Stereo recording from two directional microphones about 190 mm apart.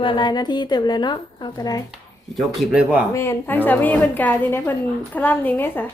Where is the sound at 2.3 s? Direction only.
5° right (ahead or behind).